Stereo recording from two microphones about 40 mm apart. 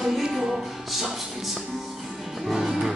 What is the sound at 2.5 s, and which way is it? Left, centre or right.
Music, centre.